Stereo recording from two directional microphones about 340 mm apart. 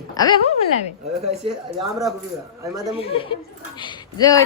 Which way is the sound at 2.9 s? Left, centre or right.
Centre.